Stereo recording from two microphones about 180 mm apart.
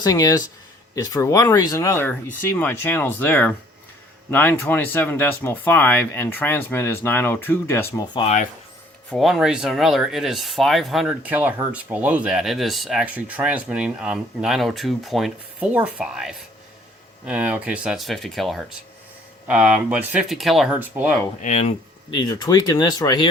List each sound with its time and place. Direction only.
0.0 s speech: 20° left (ahead or behind)
7.9 s speech: 25° left (ahead or behind)
9.0 s speech: centre (ahead or behind)
21.4 s speech: 40° left (ahead or behind)
22.1 s speech: 25° left (ahead or behind)